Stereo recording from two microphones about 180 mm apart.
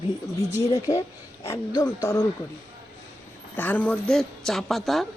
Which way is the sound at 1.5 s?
20° left (ahead or behind).